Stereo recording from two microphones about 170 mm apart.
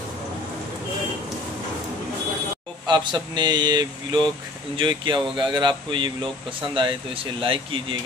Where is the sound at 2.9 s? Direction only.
25° right (ahead or behind).